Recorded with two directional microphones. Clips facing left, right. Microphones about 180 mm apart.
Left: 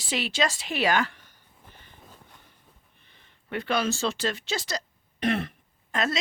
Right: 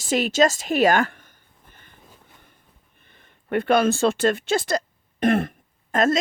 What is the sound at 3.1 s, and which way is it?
Speech, 50° right (ahead or behind).